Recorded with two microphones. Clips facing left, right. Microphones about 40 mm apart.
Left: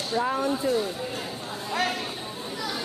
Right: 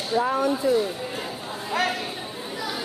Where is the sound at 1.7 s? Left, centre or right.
Centre.